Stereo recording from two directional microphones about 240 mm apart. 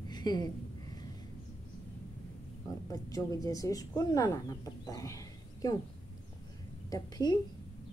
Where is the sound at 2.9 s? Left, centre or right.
Centre.